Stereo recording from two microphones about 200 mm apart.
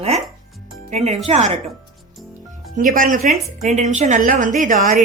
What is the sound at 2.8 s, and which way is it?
A woman's voice, 40° right (ahead or behind).